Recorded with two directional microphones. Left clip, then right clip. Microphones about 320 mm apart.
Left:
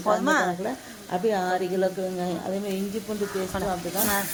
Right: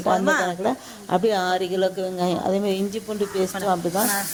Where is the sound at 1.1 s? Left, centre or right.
Right.